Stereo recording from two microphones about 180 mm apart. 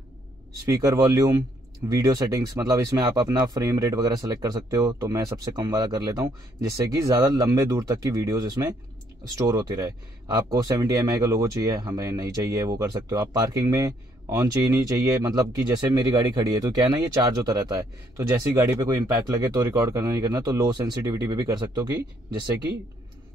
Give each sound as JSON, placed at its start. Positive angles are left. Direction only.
{"t": 0.7, "sound": "speech", "side_deg": -20}